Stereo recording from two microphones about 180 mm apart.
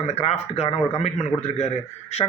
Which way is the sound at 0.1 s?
35° left (ahead or behind).